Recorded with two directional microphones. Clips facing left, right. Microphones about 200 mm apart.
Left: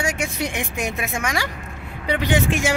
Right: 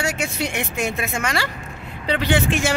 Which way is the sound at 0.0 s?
15° left (ahead or behind).